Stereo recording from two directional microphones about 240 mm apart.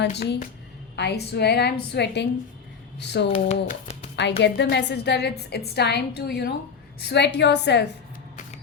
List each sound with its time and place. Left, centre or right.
0.2 s a woman's voice: left
3.3 s speech: left
4.2 s a woman's voice: left